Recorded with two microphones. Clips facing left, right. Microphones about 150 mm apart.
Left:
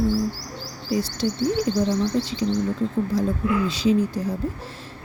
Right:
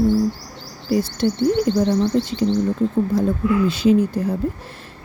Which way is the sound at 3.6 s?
60° right (ahead or behind).